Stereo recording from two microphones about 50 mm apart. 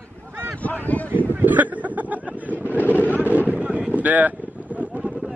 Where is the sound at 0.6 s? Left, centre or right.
Left.